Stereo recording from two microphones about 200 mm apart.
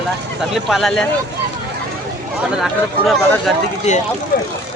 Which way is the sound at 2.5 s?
Centre (ahead or behind).